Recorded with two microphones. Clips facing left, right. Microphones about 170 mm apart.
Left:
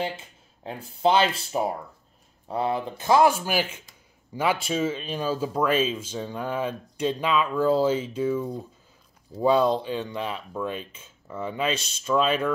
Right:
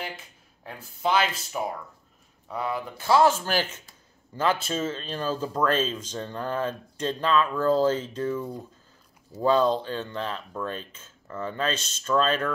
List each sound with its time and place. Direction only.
1.0 s speech: 30° left (ahead or behind)
3.1 s speech: 10° left (ahead or behind)